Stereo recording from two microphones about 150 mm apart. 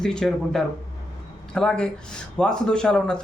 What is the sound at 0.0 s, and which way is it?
Speech, 5° left (ahead or behind).